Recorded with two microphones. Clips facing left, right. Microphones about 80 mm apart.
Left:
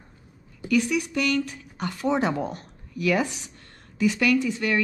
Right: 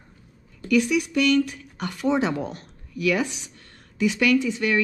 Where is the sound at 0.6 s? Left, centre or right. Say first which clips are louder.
Right 2 dB; centre.